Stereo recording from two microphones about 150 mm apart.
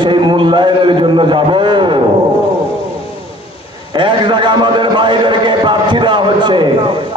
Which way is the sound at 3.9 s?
30° right (ahead or behind).